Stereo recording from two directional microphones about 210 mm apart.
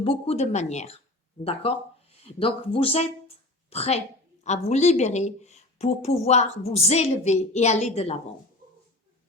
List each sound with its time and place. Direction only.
0.0 s a woman's voice: 25° left (ahead or behind)
2.2 s a woman's voice: 25° left (ahead or behind)